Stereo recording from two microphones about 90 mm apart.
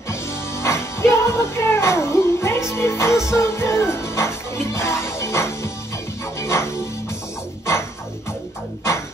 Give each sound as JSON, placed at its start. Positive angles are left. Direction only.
{"t": 0.1, "sound": "music", "side_deg": 30}